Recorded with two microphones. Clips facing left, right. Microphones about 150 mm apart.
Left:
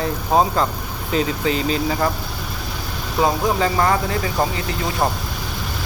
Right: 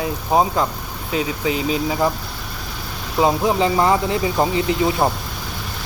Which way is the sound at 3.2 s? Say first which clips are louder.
Right 2 dB; 20° right (ahead or behind).